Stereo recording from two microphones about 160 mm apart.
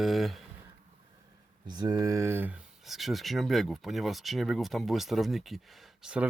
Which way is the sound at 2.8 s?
Centre (ahead or behind).